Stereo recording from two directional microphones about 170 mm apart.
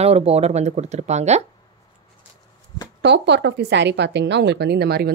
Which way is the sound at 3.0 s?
90° right.